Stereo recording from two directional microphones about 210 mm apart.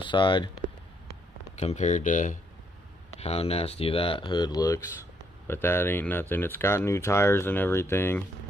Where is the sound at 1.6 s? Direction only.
35° left (ahead or behind); by 8.2 s 10° left (ahead or behind).